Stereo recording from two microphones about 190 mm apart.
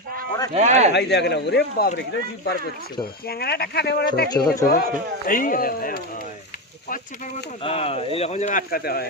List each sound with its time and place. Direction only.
0.5 s speech: 35° right (ahead or behind)
0.9 s speech: 65° left (ahead or behind)
7.6 s speech: 30° left (ahead or behind); by 9.0 s 55° left (ahead or behind)